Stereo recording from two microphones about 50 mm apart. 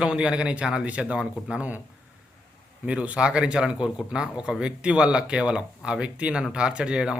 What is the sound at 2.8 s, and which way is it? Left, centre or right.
Speech, right.